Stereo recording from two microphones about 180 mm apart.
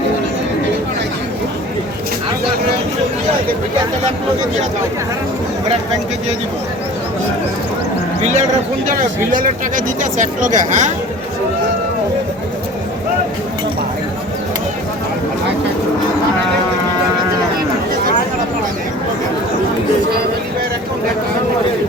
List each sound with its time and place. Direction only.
8.9 s speech: 50° right (ahead or behind)